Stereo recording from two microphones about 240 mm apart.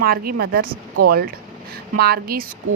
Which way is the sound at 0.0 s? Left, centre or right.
Right.